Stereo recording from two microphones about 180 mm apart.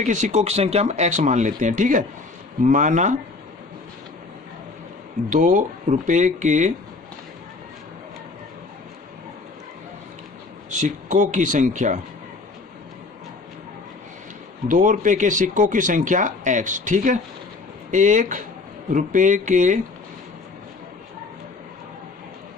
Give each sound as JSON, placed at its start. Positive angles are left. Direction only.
{"t": 0.0, "sound": "speech", "side_deg": -45}
{"t": 5.3, "sound": "speech", "side_deg": -45}
{"t": 10.7, "sound": "speech", "side_deg": -45}
{"t": 14.7, "sound": "speech", "side_deg": -45}